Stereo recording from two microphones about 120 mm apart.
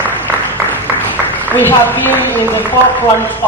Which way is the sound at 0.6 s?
15° left (ahead or behind).